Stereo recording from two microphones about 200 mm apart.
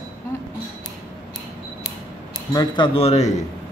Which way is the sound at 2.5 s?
20° left (ahead or behind).